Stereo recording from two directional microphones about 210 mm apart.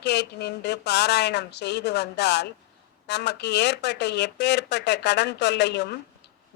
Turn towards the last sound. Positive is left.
turn(degrees=55)  # may be behind; listen again after turning